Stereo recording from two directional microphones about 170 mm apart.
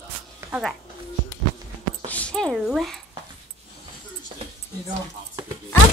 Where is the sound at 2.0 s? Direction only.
5° left (ahead or behind).